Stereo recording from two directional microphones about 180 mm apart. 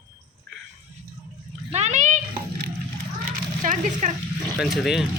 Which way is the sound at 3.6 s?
45° right (ahead or behind).